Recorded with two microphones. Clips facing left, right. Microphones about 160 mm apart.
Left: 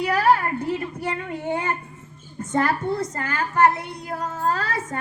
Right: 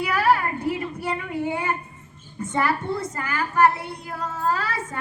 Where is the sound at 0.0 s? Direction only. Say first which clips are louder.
Left 2 dB; 40° left (ahead or behind).